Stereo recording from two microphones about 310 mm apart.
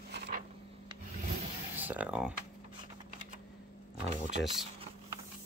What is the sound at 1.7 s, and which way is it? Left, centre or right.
Speech, centre.